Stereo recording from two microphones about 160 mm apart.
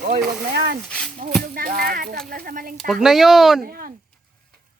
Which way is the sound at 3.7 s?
65° right (ahead or behind).